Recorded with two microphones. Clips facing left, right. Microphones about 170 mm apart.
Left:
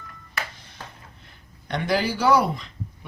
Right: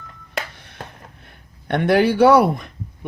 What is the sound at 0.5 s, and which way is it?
Speech, 60° right (ahead or behind).